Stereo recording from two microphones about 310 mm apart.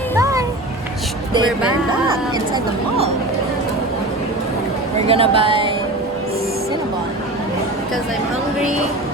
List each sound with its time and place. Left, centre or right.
0.2 s children playing: centre
1.3 s speech: centre
5.0 s speech: centre